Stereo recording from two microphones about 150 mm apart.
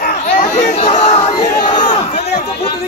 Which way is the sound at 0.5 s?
45° left (ahead or behind).